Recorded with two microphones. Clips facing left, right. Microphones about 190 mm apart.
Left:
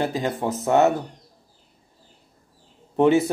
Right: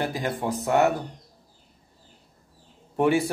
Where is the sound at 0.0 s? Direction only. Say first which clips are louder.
Left 3 dB; 20° left (ahead or behind).